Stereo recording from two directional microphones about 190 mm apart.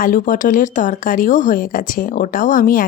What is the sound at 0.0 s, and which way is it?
A woman's voice, 45° left (ahead or behind).